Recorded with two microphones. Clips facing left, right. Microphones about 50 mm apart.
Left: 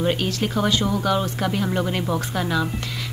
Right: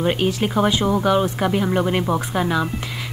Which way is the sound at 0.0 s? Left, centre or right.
Centre.